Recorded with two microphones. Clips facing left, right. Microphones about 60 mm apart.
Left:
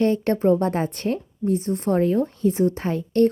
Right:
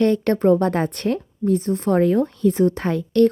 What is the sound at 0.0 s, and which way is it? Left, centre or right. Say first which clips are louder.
A woman's voice: right 2 dB; right.